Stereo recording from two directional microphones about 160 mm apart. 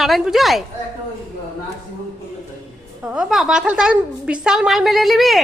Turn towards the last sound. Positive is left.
turn(degrees=0)  # may be behind; listen again after turning